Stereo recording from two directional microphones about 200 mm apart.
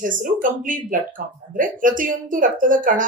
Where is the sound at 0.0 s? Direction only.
40° right (ahead or behind).